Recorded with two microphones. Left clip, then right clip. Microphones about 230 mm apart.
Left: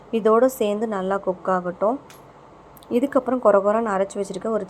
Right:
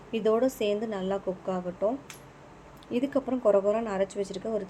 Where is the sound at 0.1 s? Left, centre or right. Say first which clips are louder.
Left 8 dB; centre.